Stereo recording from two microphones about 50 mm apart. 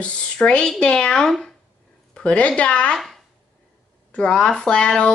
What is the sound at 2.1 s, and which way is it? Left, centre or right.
Speech, left.